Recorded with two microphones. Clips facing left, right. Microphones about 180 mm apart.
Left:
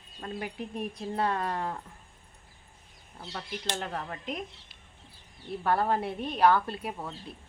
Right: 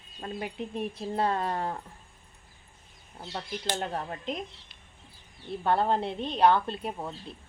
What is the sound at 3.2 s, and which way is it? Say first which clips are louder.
Speech: right 2 dB; 25° right (ahead or behind).